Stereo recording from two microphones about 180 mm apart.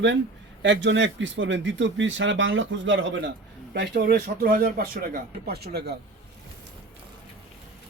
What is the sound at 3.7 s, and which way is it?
Speech, 60° right (ahead or behind).